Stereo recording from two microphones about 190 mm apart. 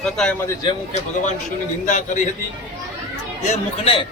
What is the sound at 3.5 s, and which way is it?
Speech, 30° left (ahead or behind).